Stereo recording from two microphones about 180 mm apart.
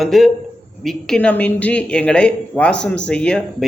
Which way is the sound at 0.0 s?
Centre (ahead or behind).